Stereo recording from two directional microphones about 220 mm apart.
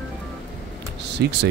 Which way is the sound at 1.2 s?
50° right (ahead or behind).